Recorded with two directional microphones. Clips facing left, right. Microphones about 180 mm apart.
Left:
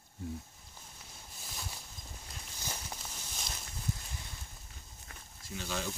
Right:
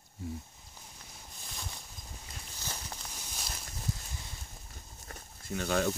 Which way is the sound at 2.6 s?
5° left (ahead or behind).